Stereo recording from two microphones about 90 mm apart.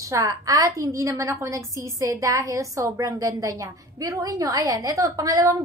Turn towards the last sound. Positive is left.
turn(degrees=-40)  # may be behind; listen again after turning